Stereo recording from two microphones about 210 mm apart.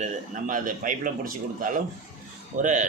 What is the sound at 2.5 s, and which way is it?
Speech, 35° right (ahead or behind).